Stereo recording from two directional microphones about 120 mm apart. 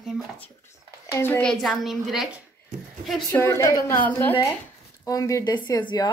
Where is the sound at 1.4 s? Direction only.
5° left (ahead or behind).